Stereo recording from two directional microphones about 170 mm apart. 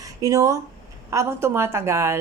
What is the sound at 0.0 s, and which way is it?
A woman's voice, 20° right (ahead or behind).